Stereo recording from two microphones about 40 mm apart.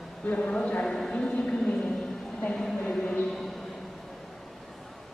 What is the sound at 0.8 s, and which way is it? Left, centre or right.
Speech, centre.